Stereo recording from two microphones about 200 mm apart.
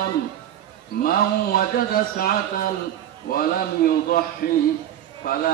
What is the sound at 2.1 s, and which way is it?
Mantra, 45° left (ahead or behind).